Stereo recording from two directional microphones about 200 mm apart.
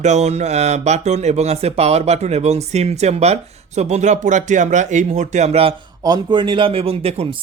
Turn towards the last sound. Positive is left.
turn(degrees=-30)  # may be behind; listen again after turning